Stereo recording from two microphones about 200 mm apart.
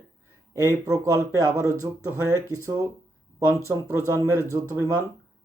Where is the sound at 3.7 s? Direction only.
15° right (ahead or behind).